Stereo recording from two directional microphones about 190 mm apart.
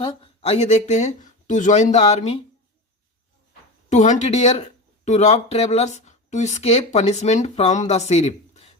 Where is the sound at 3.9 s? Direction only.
40° left (ahead or behind).